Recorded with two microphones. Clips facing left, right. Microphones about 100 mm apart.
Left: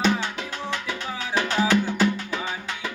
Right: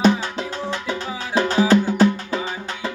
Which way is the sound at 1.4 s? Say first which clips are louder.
Right 6 dB; 35° right (ahead or behind).